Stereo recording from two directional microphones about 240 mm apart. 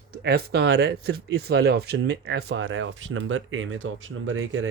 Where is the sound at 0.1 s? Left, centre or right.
Right.